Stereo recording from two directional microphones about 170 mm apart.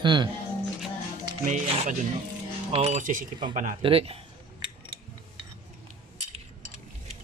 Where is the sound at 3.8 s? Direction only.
35° right (ahead or behind).